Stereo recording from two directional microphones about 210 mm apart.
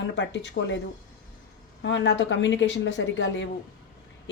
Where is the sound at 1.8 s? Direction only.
60° left (ahead or behind).